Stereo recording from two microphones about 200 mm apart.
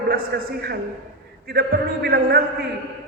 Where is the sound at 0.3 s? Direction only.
50° right (ahead or behind).